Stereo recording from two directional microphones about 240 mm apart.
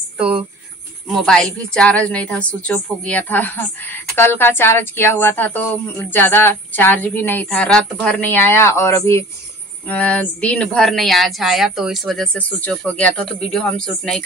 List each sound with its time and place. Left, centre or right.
1.0 s a woman's voice: centre